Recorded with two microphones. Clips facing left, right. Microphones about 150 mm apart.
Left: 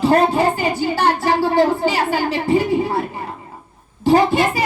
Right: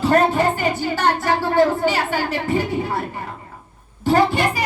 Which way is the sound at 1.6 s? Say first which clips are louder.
Left 1 dB; 40° left (ahead or behind).